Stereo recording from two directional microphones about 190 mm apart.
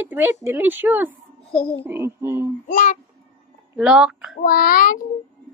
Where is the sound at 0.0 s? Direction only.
10° right (ahead or behind).